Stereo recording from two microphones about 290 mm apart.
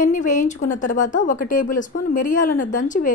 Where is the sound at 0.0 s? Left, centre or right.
Left.